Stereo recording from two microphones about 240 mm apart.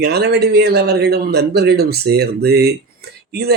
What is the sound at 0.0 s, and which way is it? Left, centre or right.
Speech, right.